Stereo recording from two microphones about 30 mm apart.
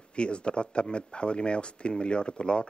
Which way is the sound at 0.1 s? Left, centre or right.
Left.